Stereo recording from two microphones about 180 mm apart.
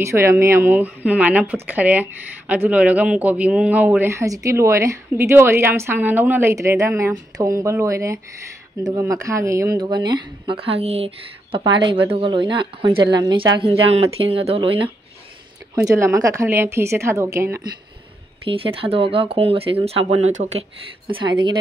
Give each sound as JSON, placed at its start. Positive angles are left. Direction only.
{"t": 0.0, "sound": "speech", "side_deg": -15}
{"t": 15.7, "sound": "speech", "side_deg": -15}
{"t": 18.5, "sound": "speech", "side_deg": -30}
{"t": 21.1, "sound": "speech", "side_deg": -25}